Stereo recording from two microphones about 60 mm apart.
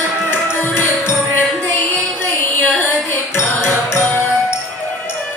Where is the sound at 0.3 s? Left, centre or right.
Left.